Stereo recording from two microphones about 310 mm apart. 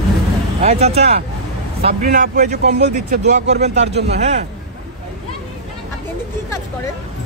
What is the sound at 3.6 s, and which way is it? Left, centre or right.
Speech, right.